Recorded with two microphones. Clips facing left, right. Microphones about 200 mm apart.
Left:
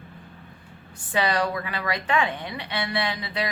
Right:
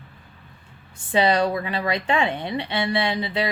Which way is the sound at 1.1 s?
25° right (ahead or behind).